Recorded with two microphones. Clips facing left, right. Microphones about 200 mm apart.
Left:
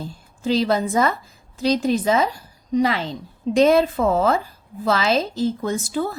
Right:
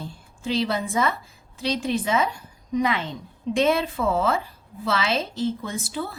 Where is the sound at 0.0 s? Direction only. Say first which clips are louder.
Left 5 dB; 40° left (ahead or behind).